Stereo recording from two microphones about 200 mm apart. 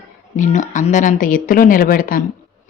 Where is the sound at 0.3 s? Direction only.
40° left (ahead or behind).